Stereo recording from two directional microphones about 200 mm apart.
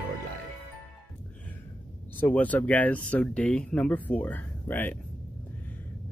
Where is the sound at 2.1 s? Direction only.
10° left (ahead or behind).